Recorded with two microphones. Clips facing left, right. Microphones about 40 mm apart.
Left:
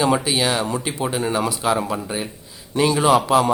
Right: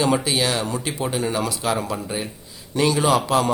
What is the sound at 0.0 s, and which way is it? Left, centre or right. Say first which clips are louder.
A man's voice: left 1 dB; centre.